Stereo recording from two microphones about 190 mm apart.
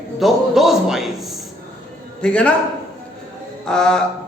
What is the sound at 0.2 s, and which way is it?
A man's voice, centre (ahead or behind).